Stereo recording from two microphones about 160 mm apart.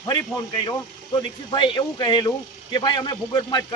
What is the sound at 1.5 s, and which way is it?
A man's voice, 30° left (ahead or behind).